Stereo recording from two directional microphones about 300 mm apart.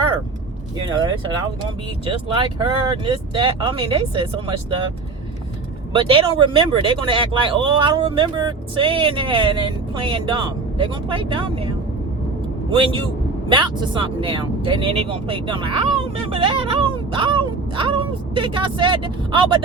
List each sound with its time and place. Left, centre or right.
2.0 s speech: centre
5.9 s speech: centre
12.7 s speech: centre
16.3 s whimper: centre